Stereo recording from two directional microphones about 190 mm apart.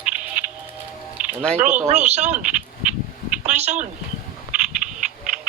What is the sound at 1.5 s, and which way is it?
Speech, 40° right (ahead or behind).